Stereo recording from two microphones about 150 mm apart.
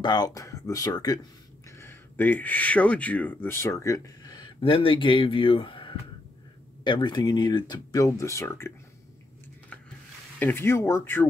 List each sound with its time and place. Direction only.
0.0 s speech: 30° left (ahead or behind)
10.4 s speech: 15° left (ahead or behind)